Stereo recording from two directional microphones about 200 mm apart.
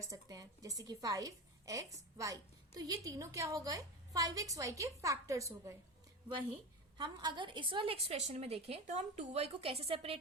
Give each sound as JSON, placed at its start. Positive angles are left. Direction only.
{"t": 0.0, "sound": "a woman's voice", "side_deg": -15}
{"t": 6.9, "sound": "a woman's voice", "side_deg": -20}